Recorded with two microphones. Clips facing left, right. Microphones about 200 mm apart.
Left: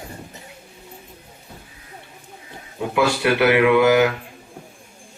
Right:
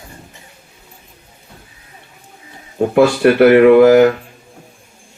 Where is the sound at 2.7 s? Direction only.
50° right (ahead or behind).